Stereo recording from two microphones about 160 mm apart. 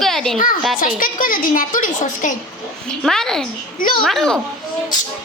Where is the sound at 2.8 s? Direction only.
5° left (ahead or behind).